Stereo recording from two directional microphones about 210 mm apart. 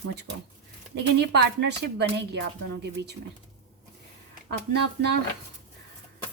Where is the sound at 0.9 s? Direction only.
55° right (ahead or behind).